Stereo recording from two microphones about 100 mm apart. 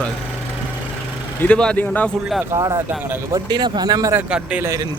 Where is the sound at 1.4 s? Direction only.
10° left (ahead or behind).